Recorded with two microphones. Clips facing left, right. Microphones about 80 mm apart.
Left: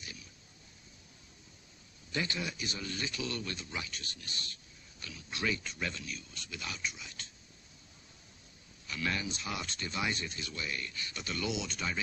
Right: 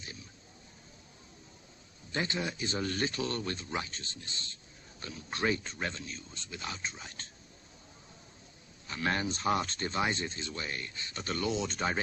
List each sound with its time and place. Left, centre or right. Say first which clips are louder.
0.0 s a sound: right 2 dB; right
2.1 s speech: right 2 dB; right
2.8 s speech: right 6 dB; right
5.0 s speech: right 4 dB; right
8.8 s speech: right 4 dB; right
11.2 s speech: right 4 dB; right